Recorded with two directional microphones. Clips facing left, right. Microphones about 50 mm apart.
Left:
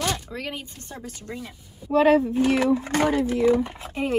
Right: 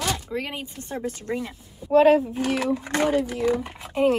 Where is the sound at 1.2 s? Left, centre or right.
Right.